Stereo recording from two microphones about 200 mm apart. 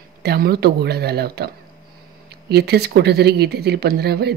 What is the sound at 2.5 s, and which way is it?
Speech, 55° right (ahead or behind).